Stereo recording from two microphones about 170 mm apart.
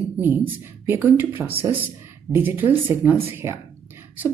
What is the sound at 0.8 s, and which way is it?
A woman's voice, 10° right (ahead or behind).